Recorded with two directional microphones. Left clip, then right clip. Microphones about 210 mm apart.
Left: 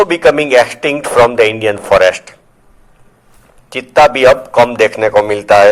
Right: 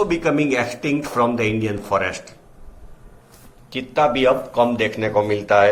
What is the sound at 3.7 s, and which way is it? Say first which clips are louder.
A man's voice: left 10 dB; 45° left (ahead or behind).